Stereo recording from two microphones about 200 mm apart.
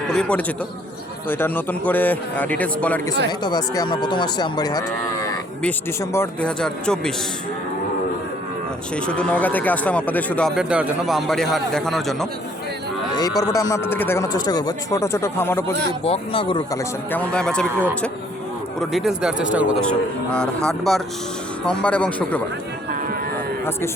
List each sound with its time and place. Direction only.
0.1 s a man's voice: 5° left (ahead or behind)
3.4 s speech: 20° left (ahead or behind)
6.1 s speech: 5° left (ahead or behind)
9.0 s speech: 5° left (ahead or behind)
13.1 s speech: 15° left (ahead or behind)
16.0 s speech: 30° left (ahead or behind)
17.1 s speech: 5° left (ahead or behind)
18.8 s speech: centre (ahead or behind)